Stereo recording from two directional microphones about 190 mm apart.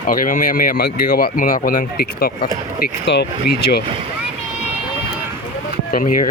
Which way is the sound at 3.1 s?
65° left (ahead or behind).